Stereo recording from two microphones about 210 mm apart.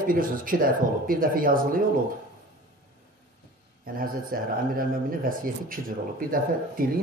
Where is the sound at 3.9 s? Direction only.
40° right (ahead or behind).